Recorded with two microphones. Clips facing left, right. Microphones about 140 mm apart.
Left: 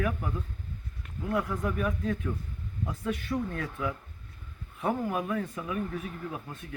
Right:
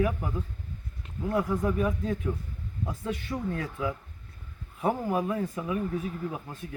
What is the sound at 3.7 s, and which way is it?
Speech, 10° right (ahead or behind).